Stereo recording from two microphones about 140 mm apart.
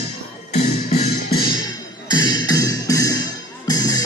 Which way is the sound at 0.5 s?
50° left (ahead or behind).